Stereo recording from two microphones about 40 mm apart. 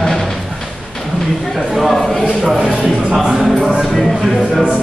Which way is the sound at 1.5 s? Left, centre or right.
Centre.